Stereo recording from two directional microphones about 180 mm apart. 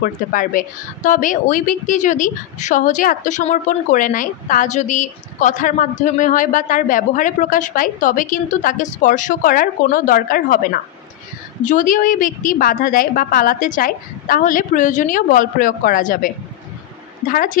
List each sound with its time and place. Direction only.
0.0 s speech: 50° left (ahead or behind)
17.3 s speech: 50° left (ahead or behind)